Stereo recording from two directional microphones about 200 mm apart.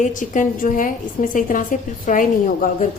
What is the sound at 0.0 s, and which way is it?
A woman's voice, 40° left (ahead or behind).